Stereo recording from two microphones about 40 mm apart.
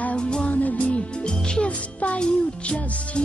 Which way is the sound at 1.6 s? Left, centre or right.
Left.